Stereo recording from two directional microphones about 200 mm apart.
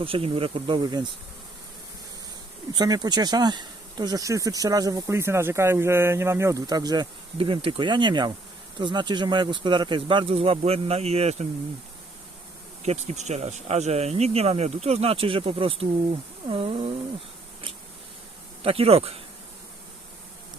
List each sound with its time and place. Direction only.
0.0 s speech: 25° right (ahead or behind)
2.7 s speech: 20° right (ahead or behind)
12.8 s speech: 35° right (ahead or behind)
18.6 s speech: 30° right (ahead or behind)